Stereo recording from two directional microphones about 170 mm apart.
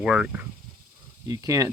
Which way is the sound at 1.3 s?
20° right (ahead or behind).